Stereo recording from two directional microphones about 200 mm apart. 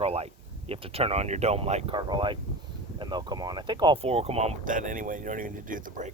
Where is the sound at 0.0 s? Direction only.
30° right (ahead or behind).